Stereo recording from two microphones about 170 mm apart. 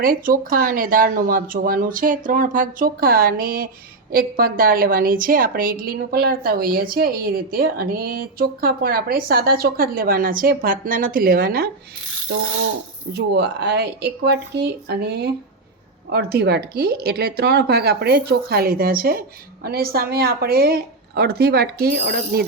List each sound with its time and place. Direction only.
0.0 s a woman's voice: 55° right (ahead or behind)
13.1 s a woman's voice: 80° right